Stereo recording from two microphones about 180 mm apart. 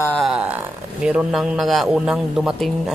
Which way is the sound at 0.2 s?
5° right (ahead or behind).